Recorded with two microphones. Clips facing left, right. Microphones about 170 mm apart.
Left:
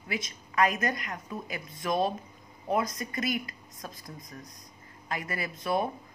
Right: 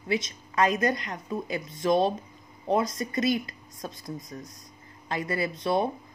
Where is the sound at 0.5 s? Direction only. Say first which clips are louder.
Right 3 dB; 25° right (ahead or behind).